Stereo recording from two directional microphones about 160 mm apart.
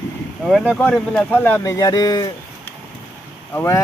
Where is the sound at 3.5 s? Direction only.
20° left (ahead or behind).